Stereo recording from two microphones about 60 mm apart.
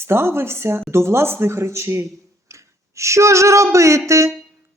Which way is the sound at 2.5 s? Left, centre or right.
Right.